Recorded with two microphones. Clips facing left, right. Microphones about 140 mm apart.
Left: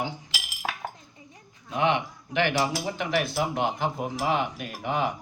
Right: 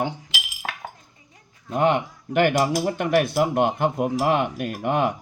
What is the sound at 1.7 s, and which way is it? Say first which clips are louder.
Speech: right 4 dB; 45° right (ahead or behind).